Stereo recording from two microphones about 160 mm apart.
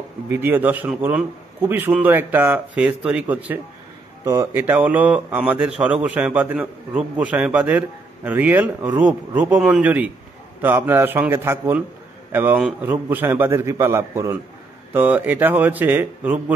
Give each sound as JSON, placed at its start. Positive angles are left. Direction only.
{"t": 0.3, "sound": "a man's voice", "side_deg": -15}